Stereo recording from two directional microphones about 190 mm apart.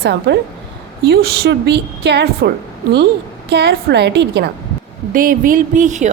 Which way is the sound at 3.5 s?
60° right (ahead or behind).